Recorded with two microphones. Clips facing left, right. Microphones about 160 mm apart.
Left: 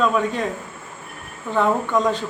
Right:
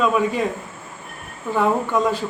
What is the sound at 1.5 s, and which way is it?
Speech, 10° right (ahead or behind).